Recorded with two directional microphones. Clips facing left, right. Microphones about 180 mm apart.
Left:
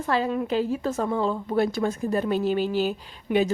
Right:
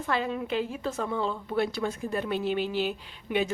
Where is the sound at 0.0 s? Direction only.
40° left (ahead or behind).